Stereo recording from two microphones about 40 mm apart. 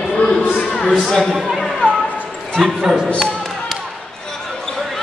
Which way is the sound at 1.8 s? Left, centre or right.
Right.